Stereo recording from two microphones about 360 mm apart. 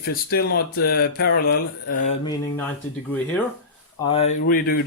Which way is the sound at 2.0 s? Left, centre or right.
Centre.